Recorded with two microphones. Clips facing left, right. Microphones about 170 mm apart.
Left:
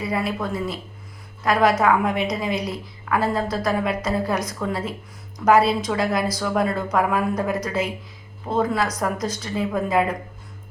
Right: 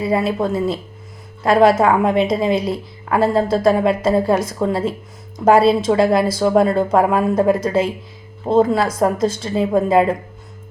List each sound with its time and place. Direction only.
0.0 s a woman's voice: 25° right (ahead or behind)